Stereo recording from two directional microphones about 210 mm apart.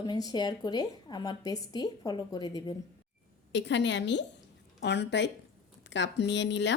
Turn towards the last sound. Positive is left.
turn(degrees=55)  # may be behind; listen again after turning